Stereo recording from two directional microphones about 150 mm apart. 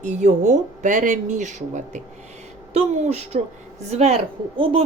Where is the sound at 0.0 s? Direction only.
50° right (ahead or behind).